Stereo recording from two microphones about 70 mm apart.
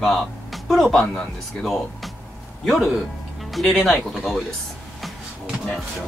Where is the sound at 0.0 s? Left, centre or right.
Centre.